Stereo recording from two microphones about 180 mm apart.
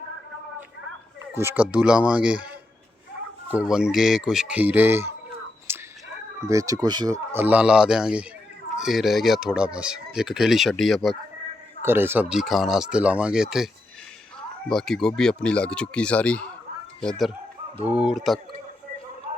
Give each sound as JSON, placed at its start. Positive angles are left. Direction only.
{"t": 1.3, "sound": "speech", "side_deg": -15}
{"t": 3.5, "sound": "speech", "side_deg": -5}
{"t": 5.7, "sound": "whispering", "side_deg": -15}
{"t": 6.5, "sound": "speech", "side_deg": -20}
{"t": 7.3, "sound": "speech", "side_deg": -10}
{"t": 11.8, "sound": "speech", "side_deg": -10}
{"t": 14.7, "sound": "speech", "side_deg": 0}